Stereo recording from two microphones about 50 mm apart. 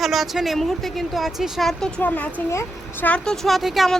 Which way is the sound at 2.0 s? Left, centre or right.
Left.